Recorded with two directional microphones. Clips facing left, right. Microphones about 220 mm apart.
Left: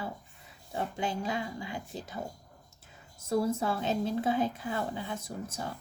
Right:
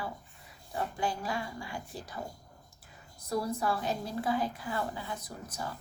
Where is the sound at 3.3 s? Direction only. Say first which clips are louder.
Left 3 dB; 25° left (ahead or behind).